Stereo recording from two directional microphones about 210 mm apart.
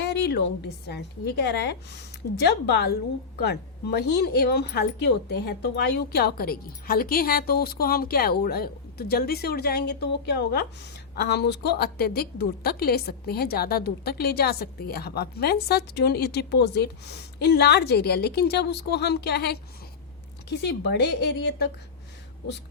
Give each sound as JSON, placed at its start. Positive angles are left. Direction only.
{"t": 0.0, "sound": "a woman's voice", "side_deg": 50}